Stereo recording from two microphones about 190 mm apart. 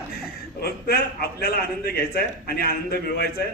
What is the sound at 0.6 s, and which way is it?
A man's voice, 55° left (ahead or behind).